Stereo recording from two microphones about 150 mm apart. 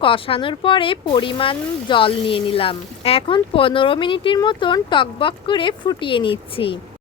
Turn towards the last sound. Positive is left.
turn(degrees=35)  # may be behind; listen again after turning